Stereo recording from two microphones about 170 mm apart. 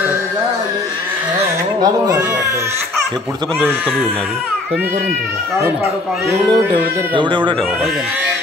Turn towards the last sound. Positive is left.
turn(degrees=-30)  # may be behind; listen again after turning